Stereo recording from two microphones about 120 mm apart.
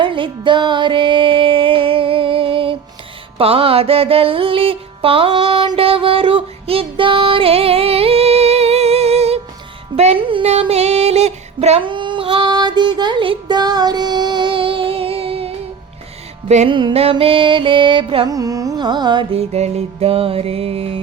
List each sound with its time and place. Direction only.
0.0 s music: 45° right (ahead or behind); by 11.8 s 65° right (ahead or behind)
11.8 s music: 40° right (ahead or behind)
16.6 s music: 45° right (ahead or behind)
18.3 s carnatic music: 30° right (ahead or behind)
19.3 s music: 60° right (ahead or behind)